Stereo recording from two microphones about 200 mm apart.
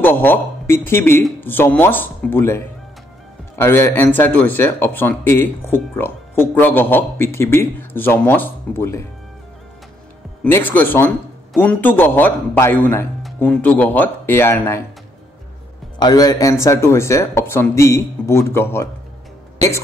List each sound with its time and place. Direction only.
0.0 s speech: 10° left (ahead or behind)
10.4 s speech: 10° left (ahead or behind)
16.0 s speech: 20° left (ahead or behind)